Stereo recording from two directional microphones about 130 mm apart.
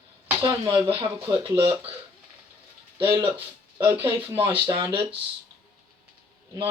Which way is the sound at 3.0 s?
40° right (ahead or behind).